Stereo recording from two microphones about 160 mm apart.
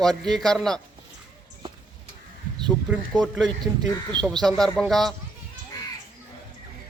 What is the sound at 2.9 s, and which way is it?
Speech, 5° right (ahead or behind).